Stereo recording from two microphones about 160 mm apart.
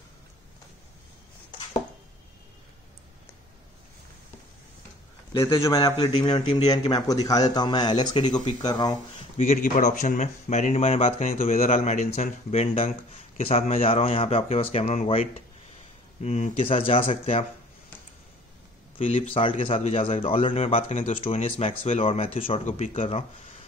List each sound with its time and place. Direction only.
5.5 s a man's voice: 20° left (ahead or behind)
9.4 s speech: 50° left (ahead or behind)
18.9 s speech: 35° left (ahead or behind)